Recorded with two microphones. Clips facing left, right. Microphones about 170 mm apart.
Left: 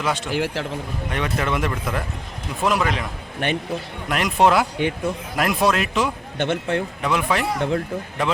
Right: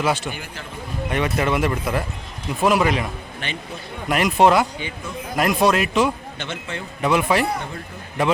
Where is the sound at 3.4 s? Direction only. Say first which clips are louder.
Left 9 dB; 60° left (ahead or behind).